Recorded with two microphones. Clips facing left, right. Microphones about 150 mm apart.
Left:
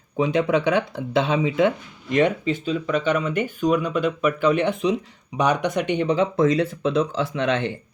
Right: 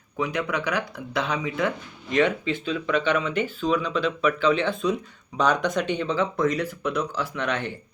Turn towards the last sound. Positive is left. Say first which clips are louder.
# left 5 dB
turn(degrees=20)  # may be behind; listen again after turning